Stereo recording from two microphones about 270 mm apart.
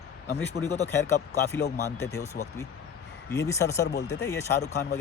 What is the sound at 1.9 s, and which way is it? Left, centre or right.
Speech, centre.